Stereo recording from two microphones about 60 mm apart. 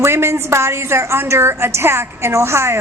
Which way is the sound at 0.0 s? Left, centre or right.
Right.